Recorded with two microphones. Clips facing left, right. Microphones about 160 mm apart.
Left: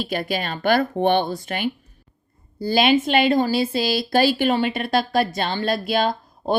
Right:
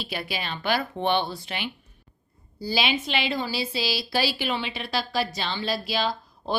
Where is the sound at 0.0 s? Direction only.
45° left (ahead or behind).